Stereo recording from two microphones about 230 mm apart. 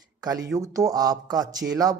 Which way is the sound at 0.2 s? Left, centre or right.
Centre.